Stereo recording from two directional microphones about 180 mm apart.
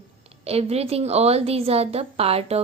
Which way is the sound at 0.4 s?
35° right (ahead or behind).